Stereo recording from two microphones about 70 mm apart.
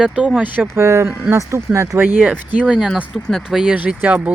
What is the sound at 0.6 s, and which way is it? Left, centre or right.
Speech, right.